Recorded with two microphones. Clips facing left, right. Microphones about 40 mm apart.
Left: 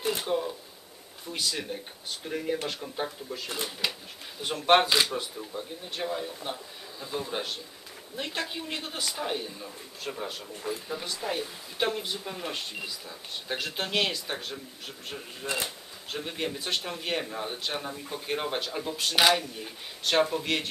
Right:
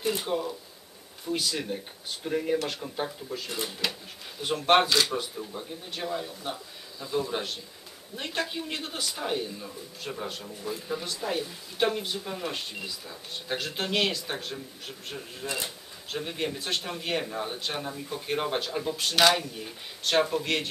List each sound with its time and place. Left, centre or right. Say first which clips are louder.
0.2 s a man's voice: left 1 dB; centre